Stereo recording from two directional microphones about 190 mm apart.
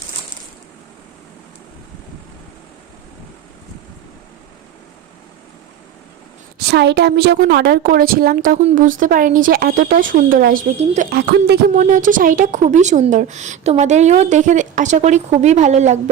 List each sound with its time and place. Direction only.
6.6 s a woman's voice: 60° right (ahead or behind)
10.8 s a woman's voice: 40° right (ahead or behind)
11.1 s a woman's voice: 60° right (ahead or behind)
11.9 s a woman's voice: 45° right (ahead or behind)